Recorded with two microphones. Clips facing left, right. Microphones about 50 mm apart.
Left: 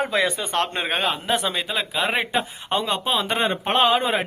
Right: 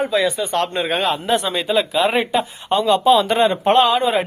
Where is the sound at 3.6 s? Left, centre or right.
Centre.